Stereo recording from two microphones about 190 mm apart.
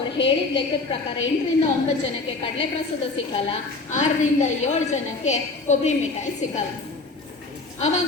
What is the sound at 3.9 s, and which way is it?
A woman's voice, 40° left (ahead or behind).